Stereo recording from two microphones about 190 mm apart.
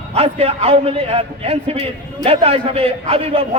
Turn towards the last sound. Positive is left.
turn(degrees=-30)  # may be behind; listen again after turning